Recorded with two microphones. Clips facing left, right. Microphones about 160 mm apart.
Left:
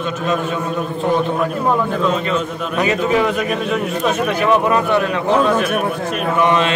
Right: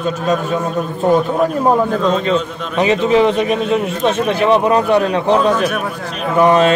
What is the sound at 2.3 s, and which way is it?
A man's voice, 30° right (ahead or behind).